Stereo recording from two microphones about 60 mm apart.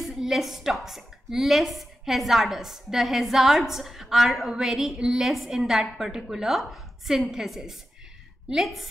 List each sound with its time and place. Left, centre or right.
0.0 s a woman's voice: centre